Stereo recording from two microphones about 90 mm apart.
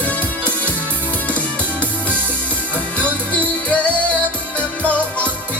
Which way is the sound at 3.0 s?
15° left (ahead or behind).